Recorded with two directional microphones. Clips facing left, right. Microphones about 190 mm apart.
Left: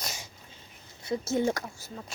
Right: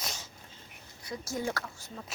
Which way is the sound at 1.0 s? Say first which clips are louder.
Left 7 dB; 25° left (ahead or behind).